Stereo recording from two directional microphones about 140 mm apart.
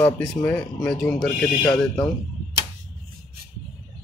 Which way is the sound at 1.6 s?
25° left (ahead or behind).